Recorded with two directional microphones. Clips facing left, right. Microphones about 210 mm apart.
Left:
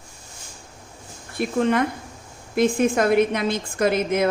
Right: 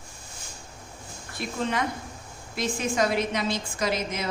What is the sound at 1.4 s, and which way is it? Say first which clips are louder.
A woman's voice: left 8 dB; 55° left (ahead or behind).